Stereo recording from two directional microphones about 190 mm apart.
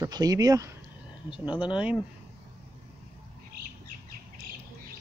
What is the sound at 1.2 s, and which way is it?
Speech, 5° right (ahead or behind).